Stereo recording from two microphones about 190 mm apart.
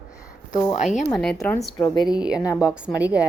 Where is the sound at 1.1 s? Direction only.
5° left (ahead or behind).